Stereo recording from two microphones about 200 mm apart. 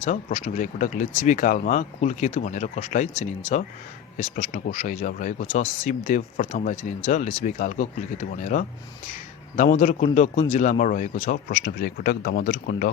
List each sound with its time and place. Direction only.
0.0 s speech: 35° left (ahead or behind)
4.4 s speech: 40° left (ahead or behind)